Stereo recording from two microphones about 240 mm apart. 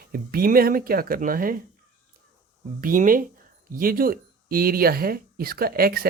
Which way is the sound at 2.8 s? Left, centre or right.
Right.